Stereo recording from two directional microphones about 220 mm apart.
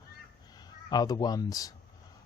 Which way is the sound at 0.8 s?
15° left (ahead or behind).